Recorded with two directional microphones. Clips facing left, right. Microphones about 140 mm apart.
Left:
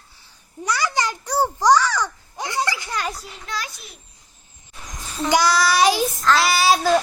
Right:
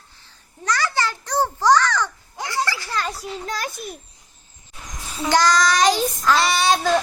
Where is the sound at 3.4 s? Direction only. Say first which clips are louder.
Right 1 dB; 45° right (ahead or behind).